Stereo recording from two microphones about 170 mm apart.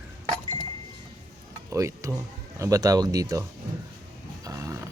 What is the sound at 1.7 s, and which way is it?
Speech, 20° right (ahead or behind).